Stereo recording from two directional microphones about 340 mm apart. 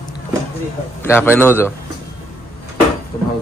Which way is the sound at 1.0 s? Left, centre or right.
Centre.